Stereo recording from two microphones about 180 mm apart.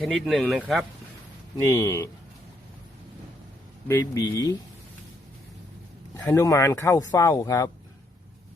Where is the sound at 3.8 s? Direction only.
15° left (ahead or behind).